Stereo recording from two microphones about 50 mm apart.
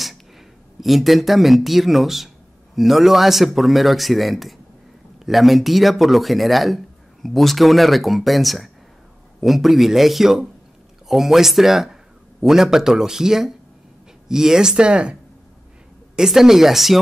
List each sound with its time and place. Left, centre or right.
0.7 s speech: centre
16.2 s speech: centre